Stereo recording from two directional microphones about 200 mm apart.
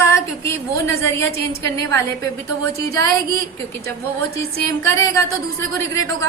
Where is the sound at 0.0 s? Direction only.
15° left (ahead or behind).